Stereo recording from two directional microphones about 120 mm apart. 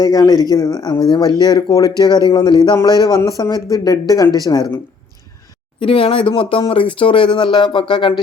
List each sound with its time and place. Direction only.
0.0 s speech: 35° left (ahead or behind)
5.8 s speech: 45° left (ahead or behind)